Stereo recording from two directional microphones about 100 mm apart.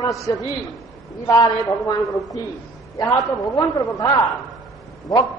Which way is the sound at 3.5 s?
40° left (ahead or behind).